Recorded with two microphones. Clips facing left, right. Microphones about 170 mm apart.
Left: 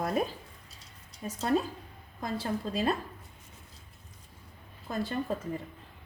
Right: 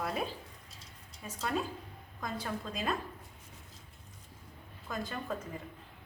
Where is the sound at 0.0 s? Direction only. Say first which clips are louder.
Left 6 dB; 45° left (ahead or behind).